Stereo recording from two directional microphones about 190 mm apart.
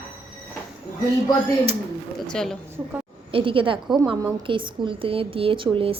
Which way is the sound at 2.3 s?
Centre (ahead or behind).